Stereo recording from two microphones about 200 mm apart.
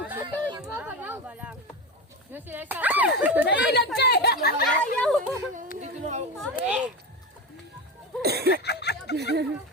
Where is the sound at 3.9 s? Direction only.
55° left (ahead or behind).